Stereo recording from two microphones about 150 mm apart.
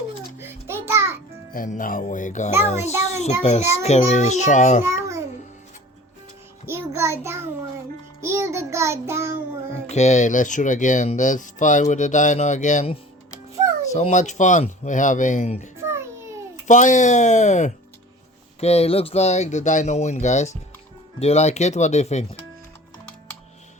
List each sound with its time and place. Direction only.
0.3 s music: 15° right (ahead or behind)
1.5 s speech: 65° left (ahead or behind)
4.8 s babbling: 20° right (ahead or behind)
6.7 s child singing: 15° right (ahead or behind)
9.9 s speech: 50° left (ahead or behind)
13.9 s speech: 50° left (ahead or behind)
15.8 s a sound: 15° right (ahead or behind)
16.6 s speech: 55° left (ahead or behind)